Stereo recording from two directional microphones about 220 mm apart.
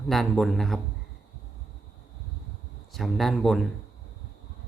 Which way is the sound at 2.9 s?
Centre (ahead or behind).